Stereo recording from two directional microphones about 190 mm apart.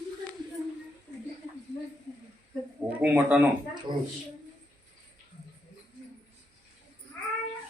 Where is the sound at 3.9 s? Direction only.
25° right (ahead or behind).